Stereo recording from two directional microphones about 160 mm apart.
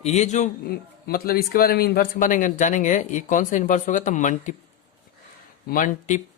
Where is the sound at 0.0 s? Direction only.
40° left (ahead or behind).